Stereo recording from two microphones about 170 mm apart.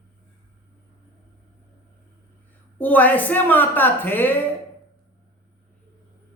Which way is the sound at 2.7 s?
10° left (ahead or behind).